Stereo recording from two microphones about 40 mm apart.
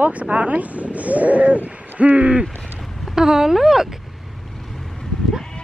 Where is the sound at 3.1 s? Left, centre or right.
Centre.